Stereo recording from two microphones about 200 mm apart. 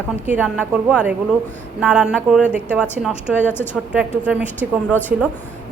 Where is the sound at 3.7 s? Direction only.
5° right (ahead or behind).